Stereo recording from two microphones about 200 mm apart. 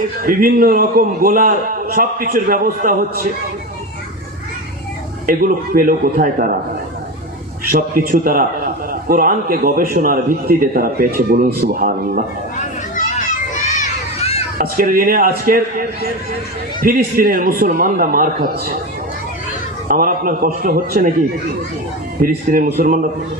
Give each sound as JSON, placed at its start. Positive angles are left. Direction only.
{"t": 0.2, "sound": "a man's voice", "side_deg": -45}
{"t": 5.2, "sound": "a man's voice", "side_deg": -45}
{"t": 7.7, "sound": "a man's voice", "side_deg": -45}
{"t": 13.1, "sound": "children playing", "side_deg": 40}
{"t": 14.6, "sound": "a man's voice", "side_deg": -45}
{"t": 19.9, "sound": "a man's voice", "side_deg": -45}
{"t": 22.2, "sound": "a man's voice", "side_deg": -45}